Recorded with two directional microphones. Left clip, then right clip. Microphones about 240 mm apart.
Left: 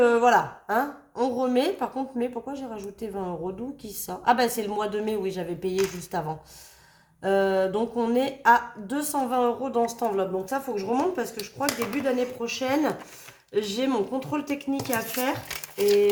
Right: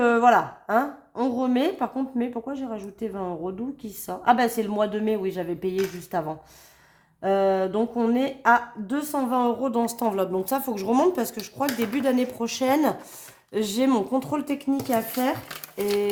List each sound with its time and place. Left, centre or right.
0.0 s a woman's voice: right